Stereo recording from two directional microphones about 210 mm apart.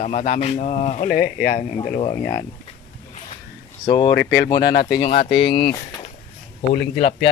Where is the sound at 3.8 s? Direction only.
20° left (ahead or behind).